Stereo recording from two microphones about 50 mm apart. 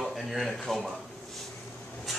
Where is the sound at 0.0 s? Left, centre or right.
Centre.